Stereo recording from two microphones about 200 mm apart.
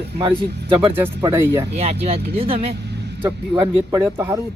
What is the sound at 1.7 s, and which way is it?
Speech, 30° right (ahead or behind).